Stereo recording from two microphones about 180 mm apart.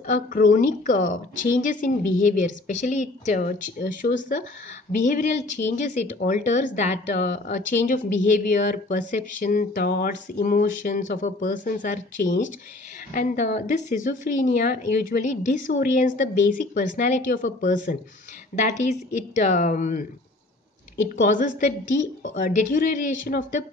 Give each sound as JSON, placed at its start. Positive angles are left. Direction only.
{"t": 0.0, "sound": "speech", "side_deg": 50}
{"t": 21.2, "sound": "speech", "side_deg": 45}